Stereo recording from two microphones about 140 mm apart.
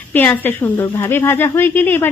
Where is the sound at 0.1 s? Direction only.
15° left (ahead or behind).